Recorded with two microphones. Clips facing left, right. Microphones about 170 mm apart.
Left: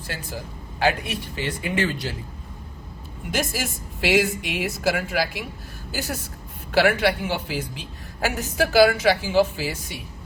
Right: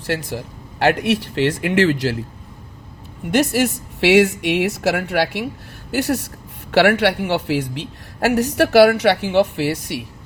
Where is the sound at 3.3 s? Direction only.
70° right (ahead or behind).